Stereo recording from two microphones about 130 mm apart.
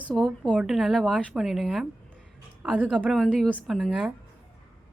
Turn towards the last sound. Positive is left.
turn(degrees=0)  # may be behind; listen again after turning